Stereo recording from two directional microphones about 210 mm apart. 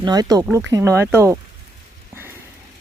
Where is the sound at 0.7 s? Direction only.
15° right (ahead or behind).